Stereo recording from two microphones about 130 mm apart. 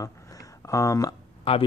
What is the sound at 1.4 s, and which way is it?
Speech, 50° left (ahead or behind).